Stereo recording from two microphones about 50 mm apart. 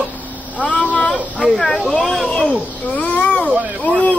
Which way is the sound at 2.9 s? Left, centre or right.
Left.